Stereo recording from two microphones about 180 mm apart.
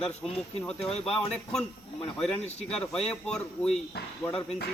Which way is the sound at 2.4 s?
35° left (ahead or behind).